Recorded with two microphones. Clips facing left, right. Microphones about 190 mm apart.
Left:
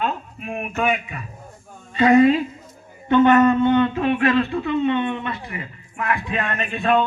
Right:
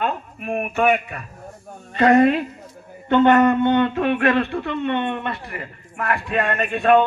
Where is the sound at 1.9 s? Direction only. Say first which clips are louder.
Right 1 dB; 65° right (ahead or behind).